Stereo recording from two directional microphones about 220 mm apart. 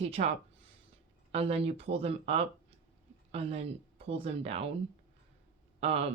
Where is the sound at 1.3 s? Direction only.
25° right (ahead or behind).